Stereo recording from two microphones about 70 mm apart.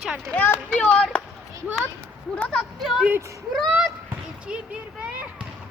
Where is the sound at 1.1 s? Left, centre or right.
Centre.